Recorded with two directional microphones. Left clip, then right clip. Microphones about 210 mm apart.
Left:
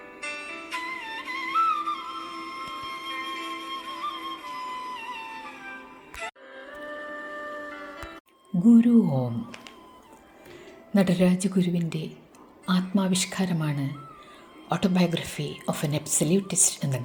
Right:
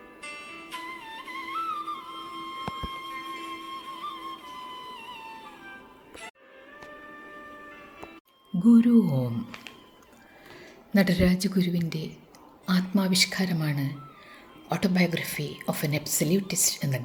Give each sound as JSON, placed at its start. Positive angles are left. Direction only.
{"t": 0.2, "sound": "music", "side_deg": 25}
{"t": 7.7, "sound": "music", "side_deg": 30}
{"t": 8.8, "sound": "speech", "side_deg": -10}
{"t": 10.9, "sound": "a woman's voice", "side_deg": 0}
{"t": 14.9, "sound": "a woman's voice", "side_deg": 5}
{"t": 15.9, "sound": "a woman's voice", "side_deg": -25}
{"t": 16.1, "sound": "a woman's voice", "side_deg": 0}
{"t": 16.5, "sound": "a woman's voice", "side_deg": -25}
{"t": 16.7, "sound": "a woman's voice", "side_deg": 0}